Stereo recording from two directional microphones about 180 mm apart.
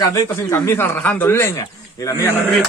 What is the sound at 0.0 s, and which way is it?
Speech, 15° left (ahead or behind).